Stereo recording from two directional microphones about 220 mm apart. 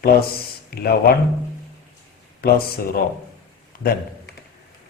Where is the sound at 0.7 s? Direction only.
45° left (ahead or behind).